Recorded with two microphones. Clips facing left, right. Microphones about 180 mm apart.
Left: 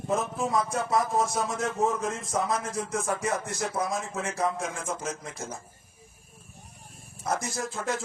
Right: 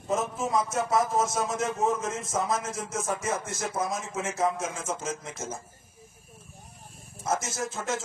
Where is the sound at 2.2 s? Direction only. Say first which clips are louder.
Even; 20° right (ahead or behind).